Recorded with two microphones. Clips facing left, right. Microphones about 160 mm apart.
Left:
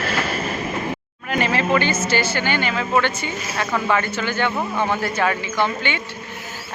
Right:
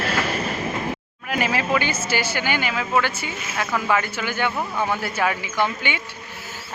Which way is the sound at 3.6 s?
5° right (ahead or behind).